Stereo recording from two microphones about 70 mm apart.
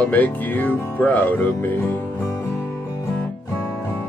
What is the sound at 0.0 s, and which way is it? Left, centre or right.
Music, left.